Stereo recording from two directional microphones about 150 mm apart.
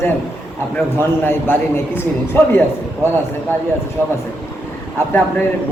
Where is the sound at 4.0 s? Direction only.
15° left (ahead or behind).